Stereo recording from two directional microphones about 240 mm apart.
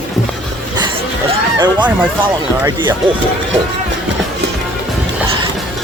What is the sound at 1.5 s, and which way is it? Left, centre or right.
Speech, centre.